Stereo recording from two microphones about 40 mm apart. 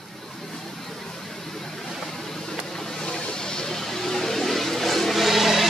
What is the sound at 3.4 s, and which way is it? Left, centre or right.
Vehicle, centre.